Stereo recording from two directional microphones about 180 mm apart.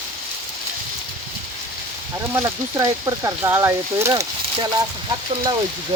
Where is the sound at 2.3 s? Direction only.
15° right (ahead or behind).